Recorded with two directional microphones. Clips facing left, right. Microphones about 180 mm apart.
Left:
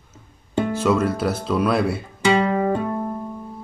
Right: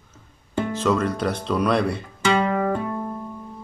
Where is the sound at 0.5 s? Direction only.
10° left (ahead or behind); by 3.0 s 25° left (ahead or behind).